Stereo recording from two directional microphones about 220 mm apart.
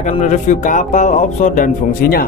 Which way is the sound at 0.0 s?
35° left (ahead or behind).